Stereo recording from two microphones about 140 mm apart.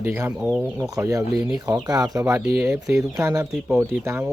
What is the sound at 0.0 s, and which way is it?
Speech, 15° right (ahead or behind).